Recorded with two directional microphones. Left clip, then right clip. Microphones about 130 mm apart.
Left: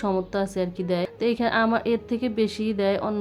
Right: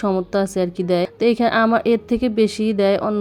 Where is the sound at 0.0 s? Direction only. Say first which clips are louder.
Right 6 dB; 40° right (ahead or behind).